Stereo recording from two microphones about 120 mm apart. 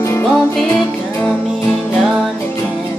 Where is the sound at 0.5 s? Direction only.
10° left (ahead or behind).